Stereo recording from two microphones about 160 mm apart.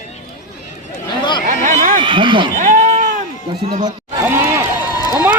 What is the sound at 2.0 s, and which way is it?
Speech, 30° right (ahead or behind).